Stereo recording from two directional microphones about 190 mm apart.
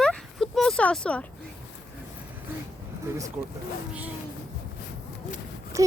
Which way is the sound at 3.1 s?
15° right (ahead or behind).